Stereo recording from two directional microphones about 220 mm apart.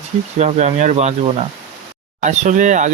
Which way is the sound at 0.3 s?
30° right (ahead or behind).